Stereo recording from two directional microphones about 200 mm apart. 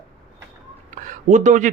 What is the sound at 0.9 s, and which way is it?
Speech, 40° right (ahead or behind).